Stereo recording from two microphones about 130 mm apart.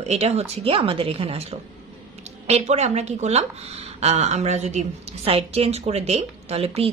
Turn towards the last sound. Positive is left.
turn(degrees=-50)  # may be behind; listen again after turning